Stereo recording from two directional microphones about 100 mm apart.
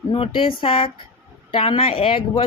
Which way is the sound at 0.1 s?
60° left (ahead or behind).